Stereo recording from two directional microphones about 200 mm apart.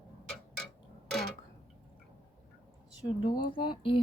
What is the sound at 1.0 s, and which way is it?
Tick-tock, 5° left (ahead or behind).